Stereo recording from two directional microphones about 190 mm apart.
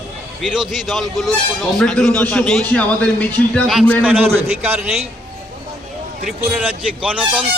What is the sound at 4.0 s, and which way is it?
Speech, 10° right (ahead or behind).